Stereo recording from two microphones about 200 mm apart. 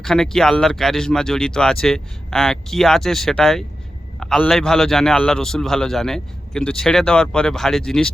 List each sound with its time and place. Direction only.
0.0 s a man's voice: centre (ahead or behind)